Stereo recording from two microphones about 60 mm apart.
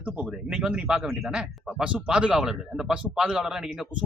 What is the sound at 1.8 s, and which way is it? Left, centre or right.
Speech, centre.